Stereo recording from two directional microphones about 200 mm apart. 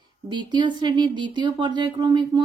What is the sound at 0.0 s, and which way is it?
Speech, 20° right (ahead or behind).